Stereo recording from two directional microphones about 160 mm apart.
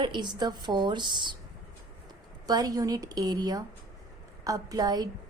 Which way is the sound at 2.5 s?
25° right (ahead or behind).